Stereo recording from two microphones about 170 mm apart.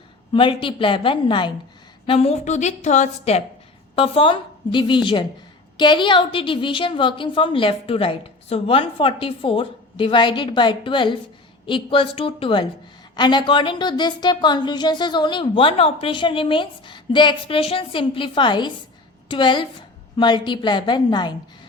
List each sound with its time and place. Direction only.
0.3 s a woman's voice: 30° left (ahead or behind)